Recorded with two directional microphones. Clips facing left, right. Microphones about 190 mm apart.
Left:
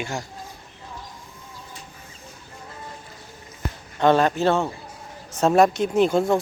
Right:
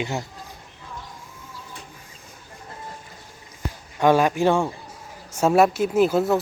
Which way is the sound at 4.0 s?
10° right (ahead or behind).